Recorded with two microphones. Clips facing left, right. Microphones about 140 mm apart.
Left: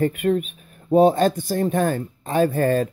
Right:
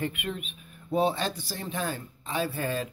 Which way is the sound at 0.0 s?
40° left (ahead or behind).